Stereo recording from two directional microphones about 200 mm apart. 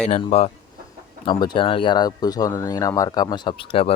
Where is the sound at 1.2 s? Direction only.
25° left (ahead or behind).